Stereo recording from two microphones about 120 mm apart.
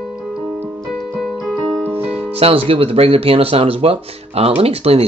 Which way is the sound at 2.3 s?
50° right (ahead or behind).